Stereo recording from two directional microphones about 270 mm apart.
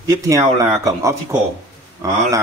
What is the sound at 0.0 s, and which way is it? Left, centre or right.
Speech, centre.